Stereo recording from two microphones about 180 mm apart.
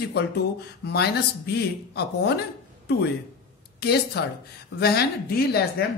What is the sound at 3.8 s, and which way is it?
Speech, 65° left (ahead or behind).